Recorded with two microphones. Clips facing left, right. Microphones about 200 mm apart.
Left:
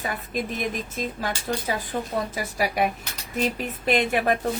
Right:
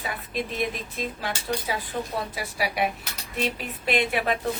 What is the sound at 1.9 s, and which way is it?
Speech, 45° left (ahead or behind).